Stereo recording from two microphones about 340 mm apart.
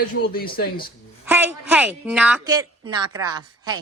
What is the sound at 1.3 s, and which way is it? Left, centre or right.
Speech, centre.